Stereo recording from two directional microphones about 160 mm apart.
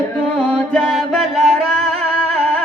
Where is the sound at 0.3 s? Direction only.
5° left (ahead or behind).